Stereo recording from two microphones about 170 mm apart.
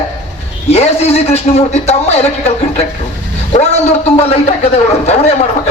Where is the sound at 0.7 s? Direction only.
40° left (ahead or behind).